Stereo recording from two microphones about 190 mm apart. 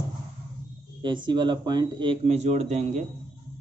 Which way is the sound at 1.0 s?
25° right (ahead or behind).